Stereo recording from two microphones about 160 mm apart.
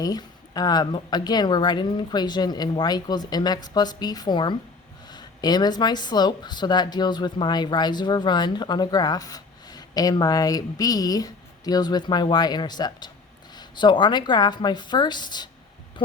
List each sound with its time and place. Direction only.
0.0 s speech: 25° left (ahead or behind)